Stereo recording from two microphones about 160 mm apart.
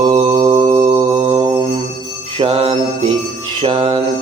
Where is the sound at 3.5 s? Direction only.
35° right (ahead or behind).